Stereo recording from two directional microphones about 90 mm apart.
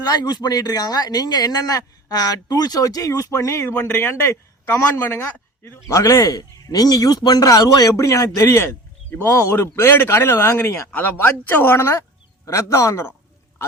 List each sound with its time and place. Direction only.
0.1 s a man's voice: 50° left (ahead or behind); by 5.8 s 25° left (ahead or behind)
5.9 s speech: 35° left (ahead or behind)